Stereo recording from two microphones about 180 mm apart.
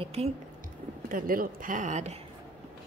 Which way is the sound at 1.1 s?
50° right (ahead or behind).